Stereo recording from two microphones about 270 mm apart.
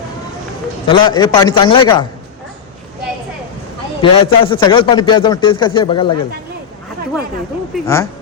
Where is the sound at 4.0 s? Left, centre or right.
Centre.